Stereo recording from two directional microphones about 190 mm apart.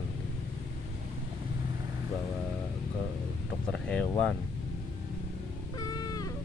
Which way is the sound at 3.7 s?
5° left (ahead or behind).